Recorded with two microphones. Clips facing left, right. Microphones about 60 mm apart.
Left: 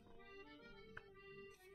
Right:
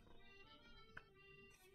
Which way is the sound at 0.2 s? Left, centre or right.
Left.